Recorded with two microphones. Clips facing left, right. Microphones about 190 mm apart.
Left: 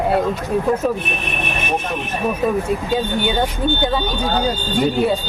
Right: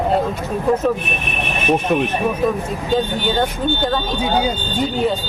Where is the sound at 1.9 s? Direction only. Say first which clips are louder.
Right 8 dB; 65° right (ahead or behind).